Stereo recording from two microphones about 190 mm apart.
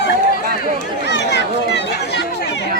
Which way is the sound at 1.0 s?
65° left (ahead or behind).